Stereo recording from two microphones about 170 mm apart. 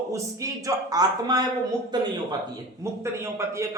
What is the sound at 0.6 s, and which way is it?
A man's voice, 20° right (ahead or behind).